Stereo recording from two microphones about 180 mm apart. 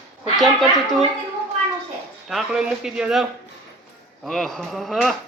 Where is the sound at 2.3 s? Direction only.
Centre (ahead or behind).